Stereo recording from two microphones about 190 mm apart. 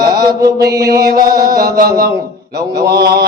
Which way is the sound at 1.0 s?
50° right (ahead or behind).